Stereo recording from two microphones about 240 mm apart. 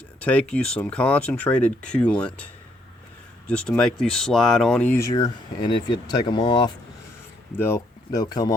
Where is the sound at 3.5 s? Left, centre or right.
Centre.